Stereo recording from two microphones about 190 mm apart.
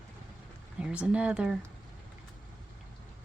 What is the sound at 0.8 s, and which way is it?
Speech, 5° right (ahead or behind).